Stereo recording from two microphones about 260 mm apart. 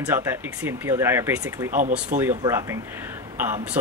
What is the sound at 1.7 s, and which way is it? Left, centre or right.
Speech, right.